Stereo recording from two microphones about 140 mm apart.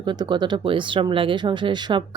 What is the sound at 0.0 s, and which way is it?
Speech, 35° right (ahead or behind).